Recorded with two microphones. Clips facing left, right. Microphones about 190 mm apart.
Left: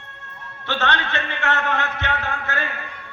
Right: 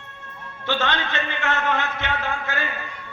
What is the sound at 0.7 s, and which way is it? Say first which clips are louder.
A man's voice: even; 65° left (ahead or behind).